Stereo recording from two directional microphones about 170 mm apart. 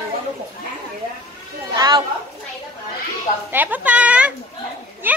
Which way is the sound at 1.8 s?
25° right (ahead or behind).